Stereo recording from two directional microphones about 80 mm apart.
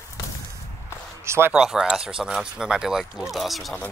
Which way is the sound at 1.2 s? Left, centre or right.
Right.